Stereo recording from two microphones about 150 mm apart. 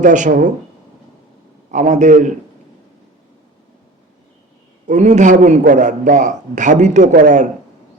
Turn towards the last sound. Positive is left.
turn(degrees=-55)  # may be behind; listen again after turning